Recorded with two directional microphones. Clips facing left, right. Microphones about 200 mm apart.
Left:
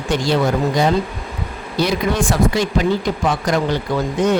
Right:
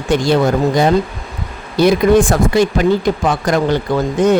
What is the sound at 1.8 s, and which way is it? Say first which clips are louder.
Speech: right 8 dB; 50° right (ahead or behind).